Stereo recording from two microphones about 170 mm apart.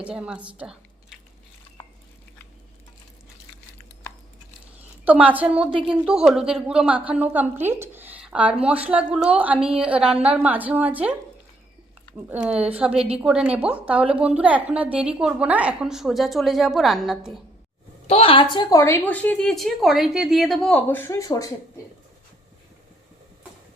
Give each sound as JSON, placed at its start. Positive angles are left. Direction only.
{"t": 0.0, "sound": "a woman's voice", "side_deg": -5}
{"t": 0.6, "sound": "squish", "side_deg": -5}
{"t": 1.8, "sound": "a sound", "side_deg": 15}
{"t": 5.0, "sound": "a woman's voice", "side_deg": -10}
{"t": 12.1, "sound": "a woman's voice", "side_deg": -10}
{"t": 18.1, "sound": "a woman's voice", "side_deg": 35}
{"t": 18.5, "sound": "a woman's voice", "side_deg": 20}